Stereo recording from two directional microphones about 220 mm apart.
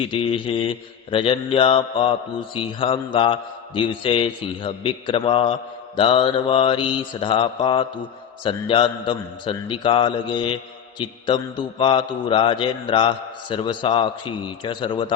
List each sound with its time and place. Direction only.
0.1 s a man's voice: 25° left (ahead or behind)